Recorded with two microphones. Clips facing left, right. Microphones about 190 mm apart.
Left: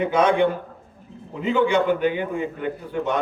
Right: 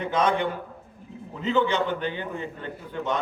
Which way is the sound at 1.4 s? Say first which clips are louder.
Left 4 dB; 10° left (ahead or behind).